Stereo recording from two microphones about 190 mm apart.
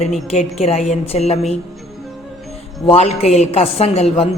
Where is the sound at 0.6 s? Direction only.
35° left (ahead or behind).